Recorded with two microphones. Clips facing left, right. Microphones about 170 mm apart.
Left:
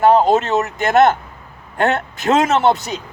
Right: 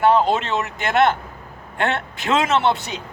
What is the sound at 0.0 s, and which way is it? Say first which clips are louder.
A man's voice: left 4 dB; 40° left (ahead or behind).